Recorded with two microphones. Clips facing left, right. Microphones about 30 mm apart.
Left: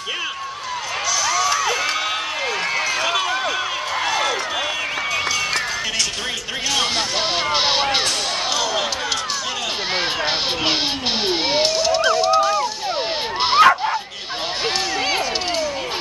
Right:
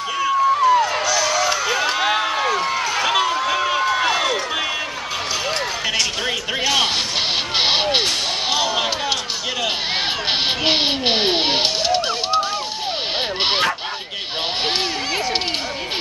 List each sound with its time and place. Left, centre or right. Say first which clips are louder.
0.7 s music: right 5 dB; centre
3.0 s run: right 2 dB; centre
7.5 s vehicle: right 2 dB; centre
10.6 s music: right 3 dB; centre
13.4 s bow-wow: left 6 dB; right